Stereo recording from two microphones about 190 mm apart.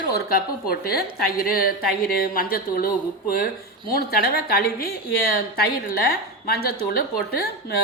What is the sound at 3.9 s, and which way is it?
A woman's voice, 50° left (ahead or behind).